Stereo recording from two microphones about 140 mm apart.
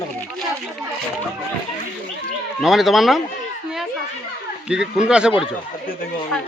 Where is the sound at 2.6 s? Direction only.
Centre (ahead or behind).